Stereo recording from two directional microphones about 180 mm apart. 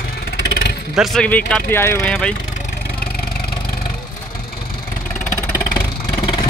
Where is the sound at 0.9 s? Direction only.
Centre (ahead or behind).